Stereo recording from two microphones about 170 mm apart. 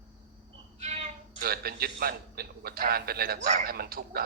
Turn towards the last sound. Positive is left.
turn(degrees=-65)  # may be behind; listen again after turning